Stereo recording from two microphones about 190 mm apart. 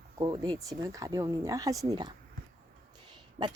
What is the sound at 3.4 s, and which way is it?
Speech, 25° right (ahead or behind).